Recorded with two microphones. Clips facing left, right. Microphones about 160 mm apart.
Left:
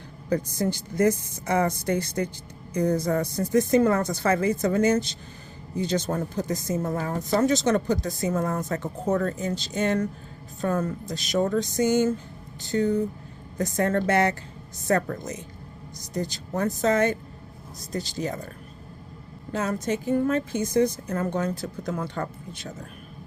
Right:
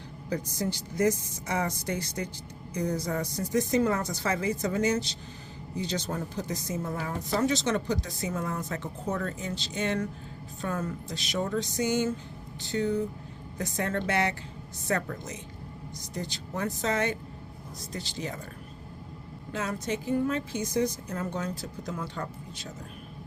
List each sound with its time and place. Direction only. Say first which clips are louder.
0.3 s a woman's voice: left 6 dB; 50° left (ahead or behind)
19.5 s a woman's voice: left 5 dB; 45° left (ahead or behind)